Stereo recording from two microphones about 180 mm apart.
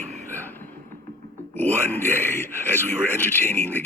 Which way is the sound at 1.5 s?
10° left (ahead or behind).